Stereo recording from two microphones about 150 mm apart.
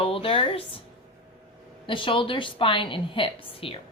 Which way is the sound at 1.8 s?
35° left (ahead or behind).